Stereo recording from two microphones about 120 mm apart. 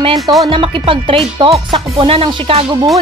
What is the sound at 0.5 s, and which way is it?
Speech, 45° right (ahead or behind).